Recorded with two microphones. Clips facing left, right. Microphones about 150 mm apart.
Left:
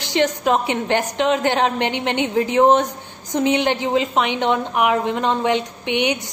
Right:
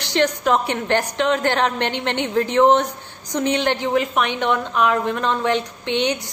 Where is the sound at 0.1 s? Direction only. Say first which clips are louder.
Even; 20° left (ahead or behind).